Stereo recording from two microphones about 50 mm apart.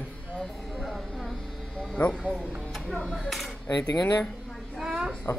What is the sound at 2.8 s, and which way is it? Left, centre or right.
Speech, centre.